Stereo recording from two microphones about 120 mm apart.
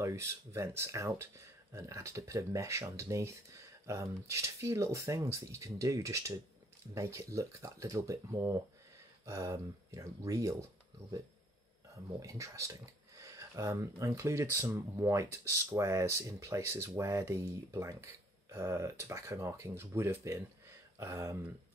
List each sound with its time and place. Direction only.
0.0 s speech: 25° right (ahead or behind)
12.2 s speech: 25° right (ahead or behind)